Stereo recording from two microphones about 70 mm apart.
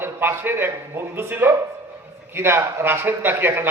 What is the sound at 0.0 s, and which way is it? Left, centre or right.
A man's voice, right.